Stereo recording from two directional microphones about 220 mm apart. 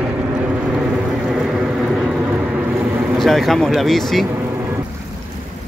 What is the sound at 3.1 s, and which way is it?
Speech, centre (ahead or behind).